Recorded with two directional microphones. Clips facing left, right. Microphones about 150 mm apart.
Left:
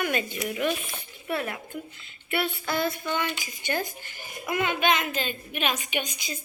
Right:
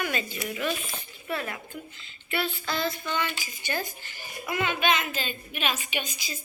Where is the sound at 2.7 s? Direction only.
55° left (ahead or behind).